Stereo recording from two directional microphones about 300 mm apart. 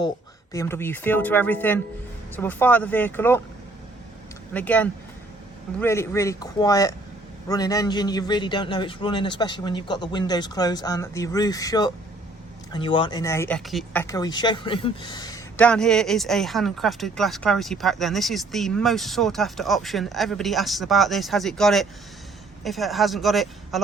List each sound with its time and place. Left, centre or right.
0.5 s a man's voice: centre
4.5 s a man's voice: centre